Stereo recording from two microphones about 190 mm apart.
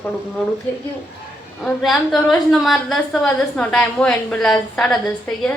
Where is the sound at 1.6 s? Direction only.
Centre (ahead or behind).